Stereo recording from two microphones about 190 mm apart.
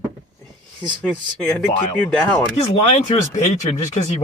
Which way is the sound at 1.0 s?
5° left (ahead or behind).